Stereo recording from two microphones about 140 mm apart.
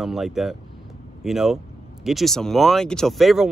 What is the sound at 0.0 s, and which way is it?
Speech, centre (ahead or behind).